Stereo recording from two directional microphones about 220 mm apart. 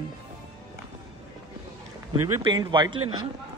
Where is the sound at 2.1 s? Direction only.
90° right.